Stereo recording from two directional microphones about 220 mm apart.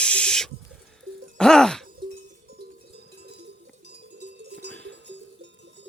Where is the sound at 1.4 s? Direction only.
5° left (ahead or behind).